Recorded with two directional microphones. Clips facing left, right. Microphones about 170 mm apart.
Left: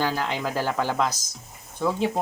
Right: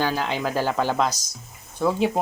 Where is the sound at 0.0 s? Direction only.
15° right (ahead or behind).